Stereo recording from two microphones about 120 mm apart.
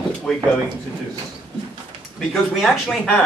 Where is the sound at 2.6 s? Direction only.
5° left (ahead or behind).